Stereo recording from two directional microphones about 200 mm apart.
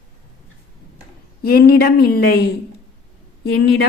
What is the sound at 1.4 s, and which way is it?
Speech, 50° left (ahead or behind).